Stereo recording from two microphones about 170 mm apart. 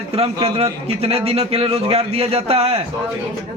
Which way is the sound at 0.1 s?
35° right (ahead or behind).